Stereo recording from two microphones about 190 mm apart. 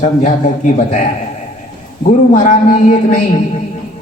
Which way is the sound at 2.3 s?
40° left (ahead or behind).